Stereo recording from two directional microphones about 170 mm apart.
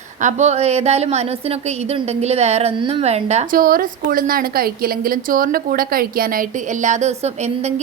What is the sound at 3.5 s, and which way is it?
A woman's voice, 55° right (ahead or behind).